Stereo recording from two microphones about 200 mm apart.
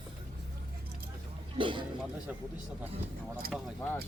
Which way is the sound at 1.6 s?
25° right (ahead or behind).